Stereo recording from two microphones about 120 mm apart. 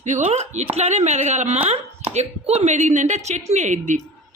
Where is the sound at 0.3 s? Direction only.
65° right (ahead or behind).